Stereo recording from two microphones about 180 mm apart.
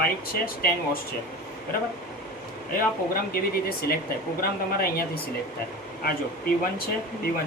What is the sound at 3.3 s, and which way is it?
Speech, 55° left (ahead or behind).